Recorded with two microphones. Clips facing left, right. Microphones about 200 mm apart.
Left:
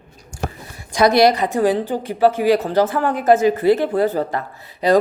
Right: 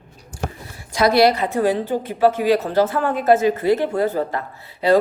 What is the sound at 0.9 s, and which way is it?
A woman's voice, 15° left (ahead or behind).